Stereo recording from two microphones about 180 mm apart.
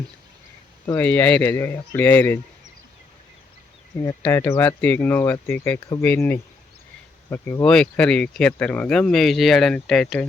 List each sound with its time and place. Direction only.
0.9 s speech: 10° left (ahead or behind)
4.2 s speech: 15° left (ahead or behind)